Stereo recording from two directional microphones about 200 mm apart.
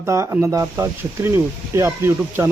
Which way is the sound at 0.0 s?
10° right (ahead or behind).